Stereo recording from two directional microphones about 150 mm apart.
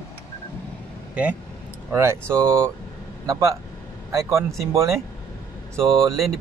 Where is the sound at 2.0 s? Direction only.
20° right (ahead or behind).